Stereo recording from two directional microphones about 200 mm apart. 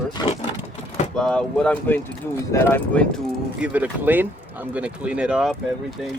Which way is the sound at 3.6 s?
10° right (ahead or behind).